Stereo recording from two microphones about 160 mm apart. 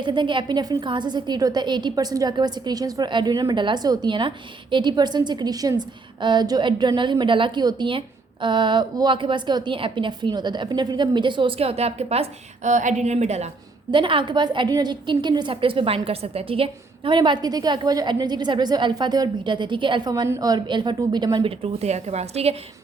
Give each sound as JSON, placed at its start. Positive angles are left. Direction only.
{"t": 0.0, "sound": "a woman's voice", "side_deg": -30}
{"t": 13.9, "sound": "a woman's voice", "side_deg": -30}
{"t": 21.6, "sound": "a woman's voice", "side_deg": -40}